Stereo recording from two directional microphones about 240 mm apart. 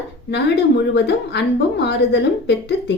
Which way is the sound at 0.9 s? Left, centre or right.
Left.